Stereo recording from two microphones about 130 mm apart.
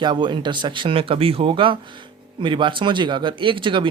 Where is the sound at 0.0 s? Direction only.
35° right (ahead or behind).